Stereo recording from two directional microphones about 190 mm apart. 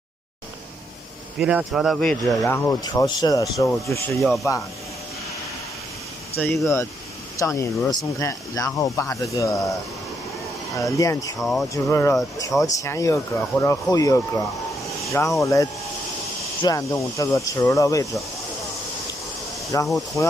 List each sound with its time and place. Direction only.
1.4 s speech: 5° right (ahead or behind); by 4.0 s 15° left (ahead or behind)
4.1 s speech: centre (ahead or behind)
6.3 s speech: 10° left (ahead or behind)
11.0 s speech: 20° left (ahead or behind)
11.3 s speech: centre (ahead or behind)
11.7 s speech: 15° left (ahead or behind)
15.4 s speech: 15° left (ahead or behind)
19.7 s speech: 20° left (ahead or behind)